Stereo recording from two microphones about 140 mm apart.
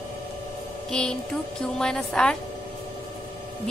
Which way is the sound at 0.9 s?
5° left (ahead or behind).